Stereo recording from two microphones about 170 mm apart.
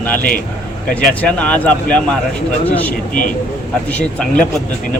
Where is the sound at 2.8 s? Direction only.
10° left (ahead or behind).